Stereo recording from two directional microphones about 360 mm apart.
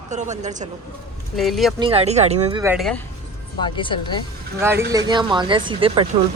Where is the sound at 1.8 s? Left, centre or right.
Centre.